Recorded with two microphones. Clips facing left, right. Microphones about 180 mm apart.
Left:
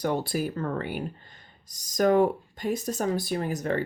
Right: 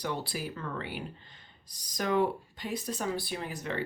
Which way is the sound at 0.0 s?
45° left (ahead or behind).